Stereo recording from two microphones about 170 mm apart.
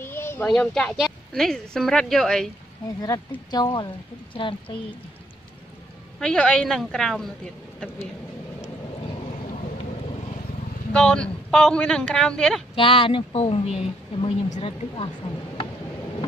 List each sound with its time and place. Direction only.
0.0 s a sound: 15° left (ahead or behind)
0.5 s speech: 5° left (ahead or behind)
3.0 s speech: 20° left (ahead or behind)
6.1 s speech: 5° left (ahead or behind)
10.9 s speech: 5° left (ahead or behind)
12.7 s a woman's voice: 30° left (ahead or behind)